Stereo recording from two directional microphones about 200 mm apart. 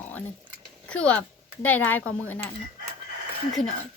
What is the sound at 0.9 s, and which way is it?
Speech, 5° left (ahead or behind).